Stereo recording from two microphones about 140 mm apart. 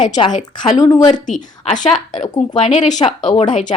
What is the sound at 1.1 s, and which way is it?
A woman's voice, 60° left (ahead or behind).